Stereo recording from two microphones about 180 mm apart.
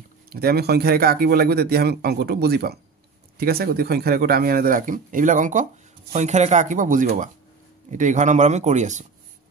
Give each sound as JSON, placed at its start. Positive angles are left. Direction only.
{"t": 0.3, "sound": "speech", "side_deg": -60}